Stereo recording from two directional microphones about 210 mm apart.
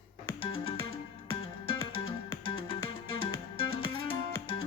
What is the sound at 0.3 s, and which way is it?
Music, 25° left (ahead or behind).